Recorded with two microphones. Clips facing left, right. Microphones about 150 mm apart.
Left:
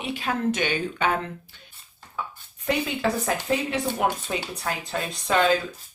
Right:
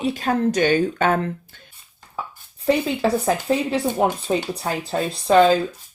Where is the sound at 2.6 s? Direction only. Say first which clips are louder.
Right 5 dB; 30° right (ahead or behind).